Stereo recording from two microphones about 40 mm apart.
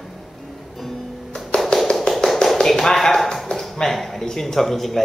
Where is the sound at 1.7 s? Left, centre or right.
Left.